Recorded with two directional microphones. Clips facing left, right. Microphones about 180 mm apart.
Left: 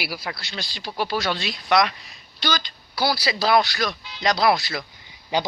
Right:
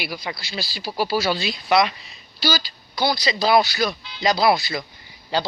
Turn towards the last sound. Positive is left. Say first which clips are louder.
# even
turn(degrees=15)  # may be behind; listen again after turning